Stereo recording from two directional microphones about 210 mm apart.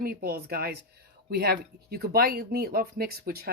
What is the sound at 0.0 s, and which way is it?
Speech, 45° right (ahead or behind).